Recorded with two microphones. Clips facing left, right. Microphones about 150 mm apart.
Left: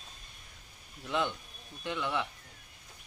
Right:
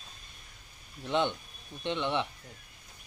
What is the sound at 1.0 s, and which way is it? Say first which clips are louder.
Speech: right 3 dB; 30° right (ahead or behind).